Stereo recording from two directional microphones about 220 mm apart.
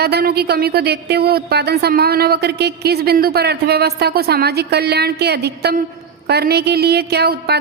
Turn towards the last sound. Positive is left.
turn(degrees=-45)  # may be behind; listen again after turning